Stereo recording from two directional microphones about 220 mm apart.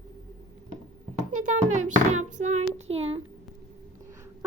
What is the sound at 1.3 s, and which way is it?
Speech, 35° right (ahead or behind).